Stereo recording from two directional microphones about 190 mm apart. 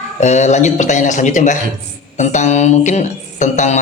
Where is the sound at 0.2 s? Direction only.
35° left (ahead or behind).